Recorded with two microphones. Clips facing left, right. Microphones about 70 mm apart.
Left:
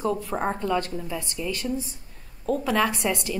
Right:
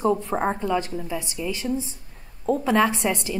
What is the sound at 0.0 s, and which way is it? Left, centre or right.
A woman's voice, right.